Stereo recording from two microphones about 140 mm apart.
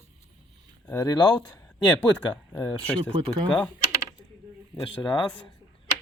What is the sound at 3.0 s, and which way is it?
Speech, 40° right (ahead or behind).